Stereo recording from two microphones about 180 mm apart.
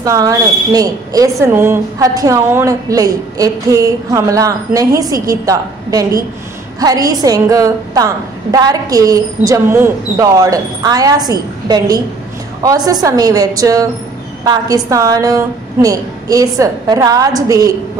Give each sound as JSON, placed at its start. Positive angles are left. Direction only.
{"t": 0.0, "sound": "a woman's voice", "side_deg": -20}